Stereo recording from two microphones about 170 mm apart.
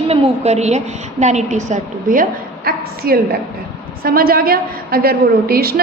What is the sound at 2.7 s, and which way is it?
A woman's voice, 60° right (ahead or behind).